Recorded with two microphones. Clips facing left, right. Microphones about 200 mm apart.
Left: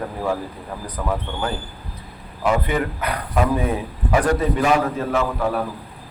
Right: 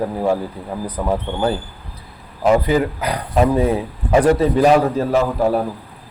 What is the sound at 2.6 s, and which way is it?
A man's voice, 30° right (ahead or behind).